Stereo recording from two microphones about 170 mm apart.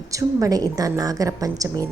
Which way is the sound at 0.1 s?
20° right (ahead or behind).